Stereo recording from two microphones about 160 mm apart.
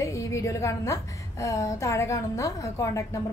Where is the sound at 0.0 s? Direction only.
20° left (ahead or behind).